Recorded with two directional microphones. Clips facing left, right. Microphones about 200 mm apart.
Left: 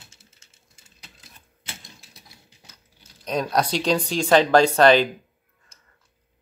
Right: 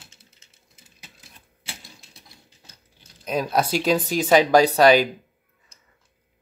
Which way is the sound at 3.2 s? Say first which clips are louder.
Even; 5° right (ahead or behind).